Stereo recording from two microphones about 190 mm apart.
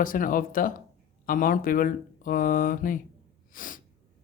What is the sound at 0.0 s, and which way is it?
Speech, 45° left (ahead or behind).